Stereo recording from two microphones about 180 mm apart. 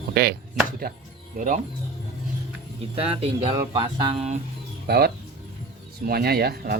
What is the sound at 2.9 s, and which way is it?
Speech, 35° right (ahead or behind).